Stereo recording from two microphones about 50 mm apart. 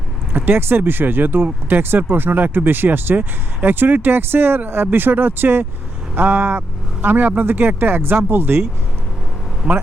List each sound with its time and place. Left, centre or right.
0.3 s speech: right
9.6 s speech: centre